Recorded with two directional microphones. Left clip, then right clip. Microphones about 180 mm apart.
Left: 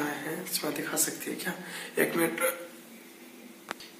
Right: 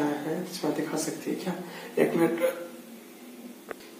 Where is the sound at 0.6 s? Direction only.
10° left (ahead or behind).